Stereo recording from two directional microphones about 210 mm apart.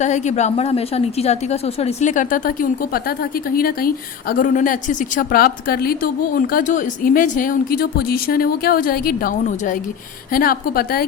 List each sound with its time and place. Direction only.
0.0 s a woman's voice: 35° left (ahead or behind)